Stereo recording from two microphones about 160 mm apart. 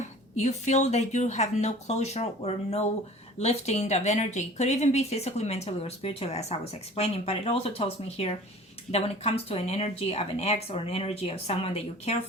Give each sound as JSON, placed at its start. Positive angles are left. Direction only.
{"t": 0.0, "sound": "speech", "side_deg": 45}